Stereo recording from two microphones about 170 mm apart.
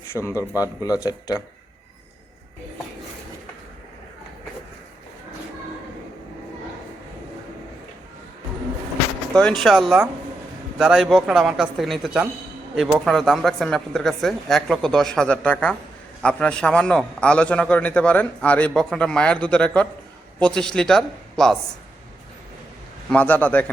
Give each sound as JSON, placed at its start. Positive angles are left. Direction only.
{"t": 0.1, "sound": "a man's voice", "side_deg": 15}
{"t": 9.3, "sound": "a man's voice", "side_deg": 5}
{"t": 23.0, "sound": "a man's voice", "side_deg": 10}